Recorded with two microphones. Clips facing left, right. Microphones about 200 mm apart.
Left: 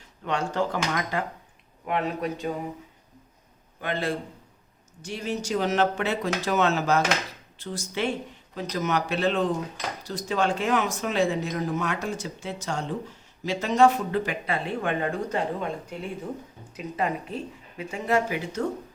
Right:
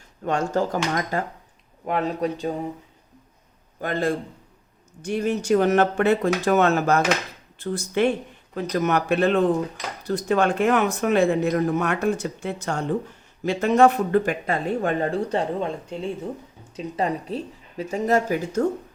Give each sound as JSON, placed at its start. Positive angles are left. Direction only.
{"t": 0.3, "sound": "speech", "side_deg": -45}
{"t": 3.8, "sound": "speech", "side_deg": -45}
{"t": 5.0, "sound": "speech", "side_deg": -55}